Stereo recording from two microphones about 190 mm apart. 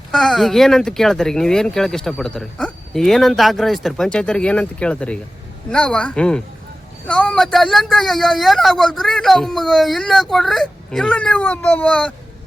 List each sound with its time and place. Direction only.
0.1 s speech: centre (ahead or behind)